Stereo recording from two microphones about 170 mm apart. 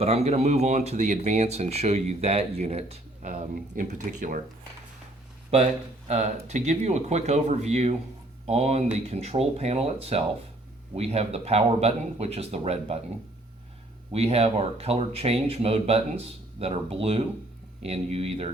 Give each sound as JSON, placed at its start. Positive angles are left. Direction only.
{"t": 0.0, "sound": "speech", "side_deg": -35}
{"t": 6.1, "sound": "speech", "side_deg": -40}
{"t": 14.1, "sound": "speech", "side_deg": -35}